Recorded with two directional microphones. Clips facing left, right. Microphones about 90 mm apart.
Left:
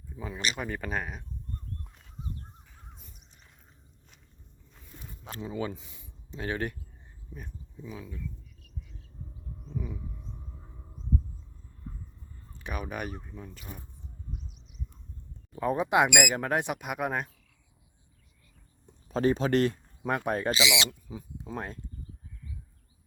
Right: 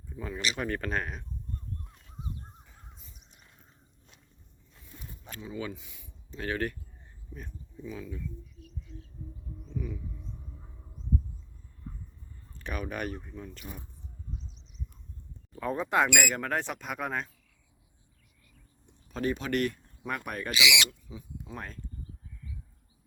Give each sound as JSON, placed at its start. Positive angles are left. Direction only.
{"t": 0.2, "sound": "speech", "side_deg": 10}
{"t": 5.3, "sound": "speech", "side_deg": 35}
{"t": 6.3, "sound": "speech", "side_deg": 20}
{"t": 7.3, "sound": "speech", "side_deg": 10}
{"t": 9.7, "sound": "speech", "side_deg": 20}
{"t": 12.5, "sound": "speech", "side_deg": 10}
{"t": 15.5, "sound": "speech", "side_deg": 15}
{"t": 18.9, "sound": "speech", "side_deg": 35}